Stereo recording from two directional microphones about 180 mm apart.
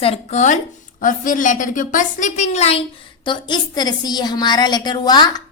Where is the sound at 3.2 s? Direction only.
25° left (ahead or behind).